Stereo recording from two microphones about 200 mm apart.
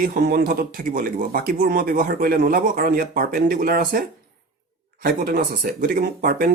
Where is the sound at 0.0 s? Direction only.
45° right (ahead or behind).